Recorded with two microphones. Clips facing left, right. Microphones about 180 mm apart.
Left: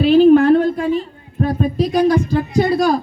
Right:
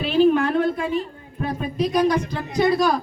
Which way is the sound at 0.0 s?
45° left (ahead or behind).